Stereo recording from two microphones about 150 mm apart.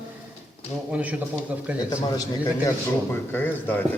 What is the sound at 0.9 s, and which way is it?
Speech, 10° right (ahead or behind).